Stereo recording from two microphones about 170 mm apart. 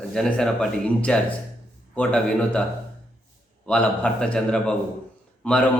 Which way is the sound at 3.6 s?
5° left (ahead or behind).